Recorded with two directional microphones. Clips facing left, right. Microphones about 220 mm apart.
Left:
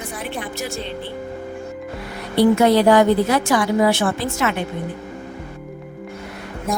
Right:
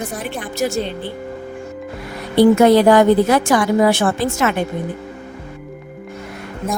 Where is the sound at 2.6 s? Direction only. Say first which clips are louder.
Right 3 dB; 50° right (ahead or behind).